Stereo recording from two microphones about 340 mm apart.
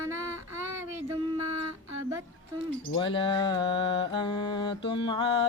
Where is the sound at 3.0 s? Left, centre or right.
Centre.